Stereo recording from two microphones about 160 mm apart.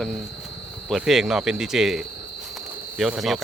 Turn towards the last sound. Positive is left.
turn(degrees=0)  # may be behind; listen again after turning